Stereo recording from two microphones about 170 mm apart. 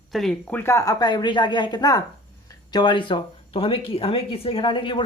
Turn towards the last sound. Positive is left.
turn(degrees=30)  # may be behind; listen again after turning